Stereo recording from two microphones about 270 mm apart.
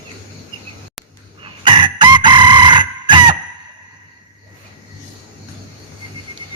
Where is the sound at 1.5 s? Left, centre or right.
Centre.